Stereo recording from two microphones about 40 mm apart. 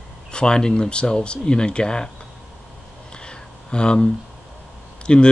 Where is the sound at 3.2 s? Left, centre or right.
Left.